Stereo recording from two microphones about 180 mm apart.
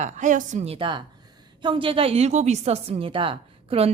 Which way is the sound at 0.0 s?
45° right (ahead or behind).